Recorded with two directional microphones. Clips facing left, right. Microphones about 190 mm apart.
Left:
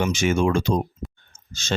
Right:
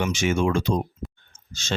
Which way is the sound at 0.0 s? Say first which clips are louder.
Left 2 dB; 40° left (ahead or behind).